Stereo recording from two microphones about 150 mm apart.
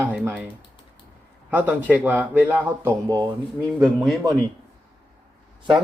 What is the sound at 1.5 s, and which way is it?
Speech, 10° right (ahead or behind).